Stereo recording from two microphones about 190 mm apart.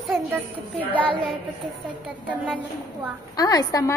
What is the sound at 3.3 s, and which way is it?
Speech, 20° left (ahead or behind).